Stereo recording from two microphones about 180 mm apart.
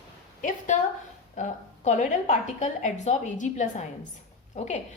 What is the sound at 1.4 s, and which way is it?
A woman's voice, 40° left (ahead or behind).